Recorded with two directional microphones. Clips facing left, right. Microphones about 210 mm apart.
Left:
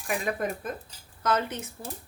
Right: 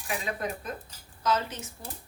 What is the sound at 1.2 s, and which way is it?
Speech, 55° left (ahead or behind).